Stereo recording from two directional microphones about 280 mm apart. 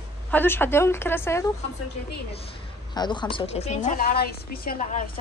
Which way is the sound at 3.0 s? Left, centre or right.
Centre.